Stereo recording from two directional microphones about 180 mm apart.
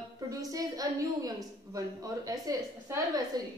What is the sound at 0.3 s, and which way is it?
A woman's voice, 20° right (ahead or behind).